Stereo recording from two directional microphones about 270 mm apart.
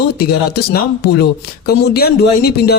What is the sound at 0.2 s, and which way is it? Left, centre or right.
Speech, left.